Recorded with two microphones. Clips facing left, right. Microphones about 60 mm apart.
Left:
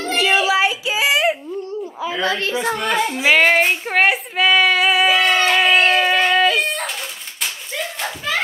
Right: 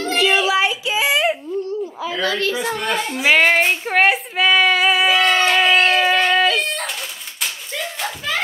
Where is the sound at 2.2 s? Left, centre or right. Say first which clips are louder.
Even; left.